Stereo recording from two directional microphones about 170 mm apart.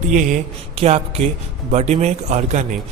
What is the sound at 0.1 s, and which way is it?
Speech, 50° right (ahead or behind).